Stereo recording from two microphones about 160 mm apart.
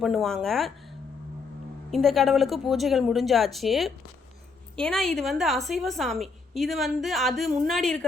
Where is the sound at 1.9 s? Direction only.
Centre (ahead or behind).